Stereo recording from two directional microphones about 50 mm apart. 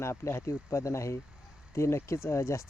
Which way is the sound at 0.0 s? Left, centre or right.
Left.